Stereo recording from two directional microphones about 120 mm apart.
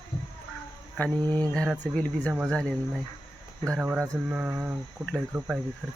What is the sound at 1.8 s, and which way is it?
Speech, 10° left (ahead or behind).